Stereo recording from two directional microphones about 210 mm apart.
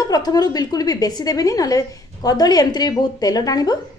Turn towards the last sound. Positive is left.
turn(degrees=20)  # may be behind; listen again after turning